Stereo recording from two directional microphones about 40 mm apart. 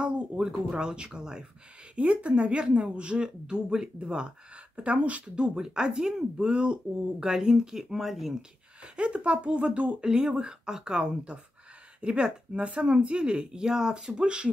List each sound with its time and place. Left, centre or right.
0.7 s speech: right
2.0 s speech: right
4.7 s speech: right
5.3 s speech: centre
7.2 s speech: centre
8.9 s speech: right
9.9 s speech: centre